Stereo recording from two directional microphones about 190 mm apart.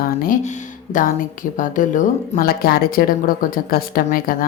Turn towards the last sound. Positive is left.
turn(degrees=50)  # may be behind; listen again after turning